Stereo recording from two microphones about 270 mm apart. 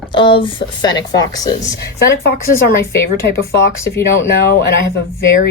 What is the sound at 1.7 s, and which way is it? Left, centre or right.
Speech, left.